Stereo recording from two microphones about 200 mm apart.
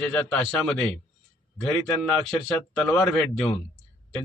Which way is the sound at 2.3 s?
Centre (ahead or behind).